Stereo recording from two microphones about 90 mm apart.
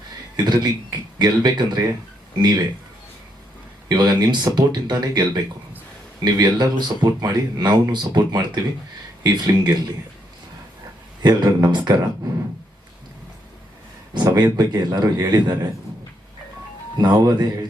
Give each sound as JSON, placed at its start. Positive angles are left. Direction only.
{"t": 0.3, "sound": "speech", "side_deg": -50}
{"t": 3.8, "sound": "speech", "side_deg": -50}
{"t": 11.2, "sound": "speech", "side_deg": -50}
{"t": 14.3, "sound": "speech", "side_deg": -50}
{"t": 17.0, "sound": "speech", "side_deg": -50}